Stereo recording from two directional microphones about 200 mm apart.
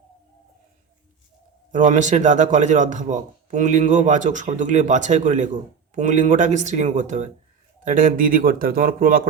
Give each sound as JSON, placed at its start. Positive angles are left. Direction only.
{"t": 1.7, "sound": "speech", "side_deg": -35}